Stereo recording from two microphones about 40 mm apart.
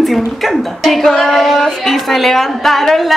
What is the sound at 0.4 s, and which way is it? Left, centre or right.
Speech, centre.